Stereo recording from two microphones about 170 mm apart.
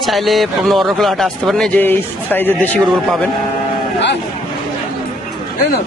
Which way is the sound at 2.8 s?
Centre (ahead or behind).